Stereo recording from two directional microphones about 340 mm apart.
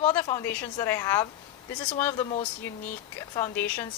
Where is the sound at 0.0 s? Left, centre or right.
Centre.